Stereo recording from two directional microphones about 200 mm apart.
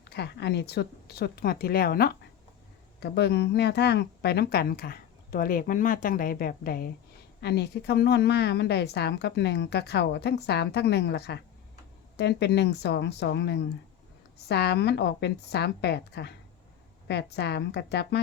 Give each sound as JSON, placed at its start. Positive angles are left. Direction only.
{"t": 0.1, "sound": "a woman's voice", "side_deg": 55}